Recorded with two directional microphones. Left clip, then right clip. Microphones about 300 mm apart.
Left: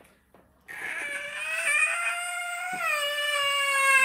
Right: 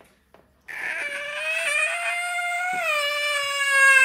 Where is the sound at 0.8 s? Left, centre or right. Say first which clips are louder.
Right 4 dB; right.